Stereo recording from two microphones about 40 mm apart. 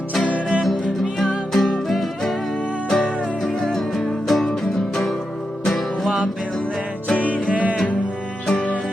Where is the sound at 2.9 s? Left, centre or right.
Left.